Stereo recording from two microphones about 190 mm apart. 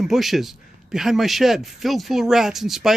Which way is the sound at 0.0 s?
Centre (ahead or behind).